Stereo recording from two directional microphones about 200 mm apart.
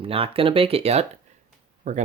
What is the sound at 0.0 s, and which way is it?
Speech, 30° right (ahead or behind).